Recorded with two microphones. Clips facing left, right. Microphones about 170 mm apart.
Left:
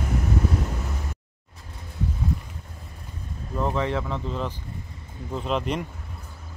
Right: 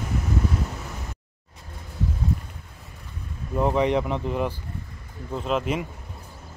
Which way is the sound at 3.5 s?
15° right (ahead or behind).